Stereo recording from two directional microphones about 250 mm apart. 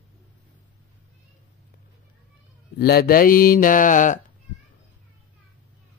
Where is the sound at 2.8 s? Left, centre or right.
Left.